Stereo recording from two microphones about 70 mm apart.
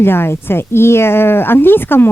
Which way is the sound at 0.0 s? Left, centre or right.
Left.